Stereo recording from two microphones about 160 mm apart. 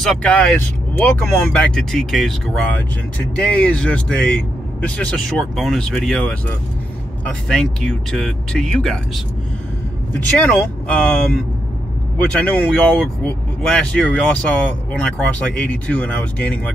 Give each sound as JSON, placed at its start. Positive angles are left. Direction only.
{"t": 0.0, "sound": "speech", "side_deg": 5}
{"t": 7.4, "sound": "speech", "side_deg": 5}
{"t": 10.4, "sound": "speech", "side_deg": 10}
{"t": 12.2, "sound": "speech", "side_deg": 10}